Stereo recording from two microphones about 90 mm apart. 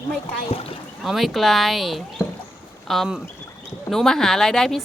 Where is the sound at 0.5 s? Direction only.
90° left.